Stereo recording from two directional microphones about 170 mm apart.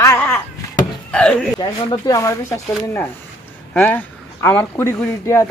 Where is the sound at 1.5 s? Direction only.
25° left (ahead or behind).